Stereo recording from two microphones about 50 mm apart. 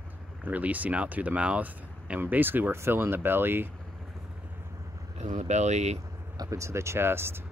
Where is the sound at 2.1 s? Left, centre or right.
Right.